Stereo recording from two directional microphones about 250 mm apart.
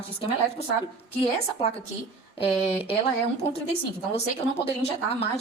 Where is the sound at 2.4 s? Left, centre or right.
Left.